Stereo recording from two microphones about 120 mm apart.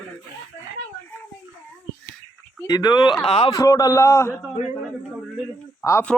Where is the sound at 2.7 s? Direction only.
35° left (ahead or behind).